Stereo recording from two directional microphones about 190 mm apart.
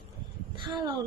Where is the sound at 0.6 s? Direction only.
20° right (ahead or behind).